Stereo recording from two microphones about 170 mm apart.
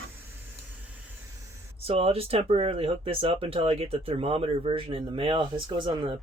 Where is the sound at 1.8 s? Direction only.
35° right (ahead or behind).